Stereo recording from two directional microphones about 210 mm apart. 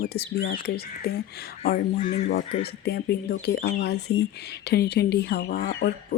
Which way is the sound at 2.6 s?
50° left (ahead or behind).